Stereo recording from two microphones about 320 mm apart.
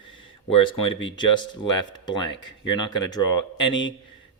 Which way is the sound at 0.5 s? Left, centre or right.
Centre.